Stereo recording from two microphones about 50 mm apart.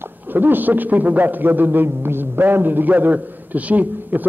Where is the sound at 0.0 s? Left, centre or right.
Right.